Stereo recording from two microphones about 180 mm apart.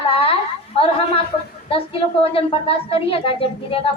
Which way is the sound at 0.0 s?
30° left (ahead or behind).